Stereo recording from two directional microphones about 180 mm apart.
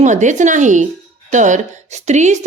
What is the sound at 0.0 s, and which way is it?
A woman's voice, 40° right (ahead or behind).